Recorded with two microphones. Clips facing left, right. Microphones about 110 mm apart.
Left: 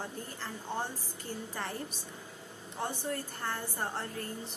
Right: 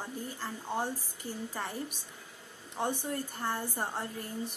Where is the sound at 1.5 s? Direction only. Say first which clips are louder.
Right 1 dB; 10° right (ahead or behind).